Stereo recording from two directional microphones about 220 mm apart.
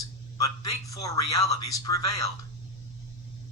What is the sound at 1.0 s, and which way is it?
A man's voice, 15° left (ahead or behind).